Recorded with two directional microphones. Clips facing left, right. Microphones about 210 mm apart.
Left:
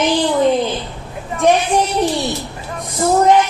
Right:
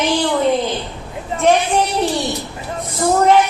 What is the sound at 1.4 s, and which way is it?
A woman's voice, 15° left (ahead or behind).